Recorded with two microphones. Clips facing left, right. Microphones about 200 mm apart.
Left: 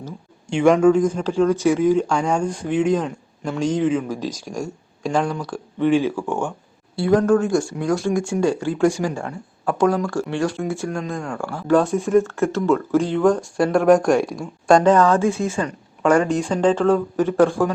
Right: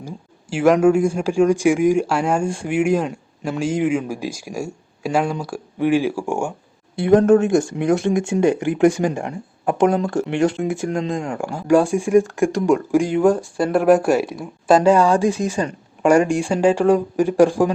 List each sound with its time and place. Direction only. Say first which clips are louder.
0.0 s speech: right 1 dB; 5° right (ahead or behind)
6.9 s speech: right 3 dB; 20° right (ahead or behind)